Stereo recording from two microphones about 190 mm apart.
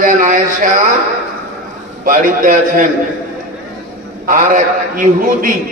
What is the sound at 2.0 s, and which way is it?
Speech, 45° right (ahead or behind).